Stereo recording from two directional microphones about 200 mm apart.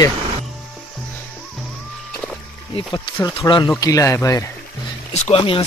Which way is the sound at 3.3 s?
25° left (ahead or behind).